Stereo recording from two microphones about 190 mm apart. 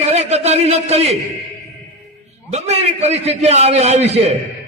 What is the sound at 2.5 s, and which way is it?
A man's voice, 35° right (ahead or behind).